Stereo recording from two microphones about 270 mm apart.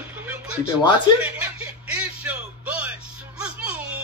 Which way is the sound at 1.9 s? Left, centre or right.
Centre.